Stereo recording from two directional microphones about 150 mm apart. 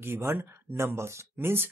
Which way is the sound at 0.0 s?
15° right (ahead or behind).